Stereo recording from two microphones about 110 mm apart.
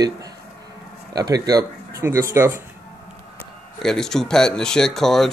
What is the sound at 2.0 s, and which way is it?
Speech, 20° right (ahead or behind).